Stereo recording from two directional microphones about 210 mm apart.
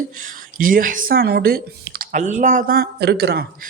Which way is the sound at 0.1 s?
40° right (ahead or behind).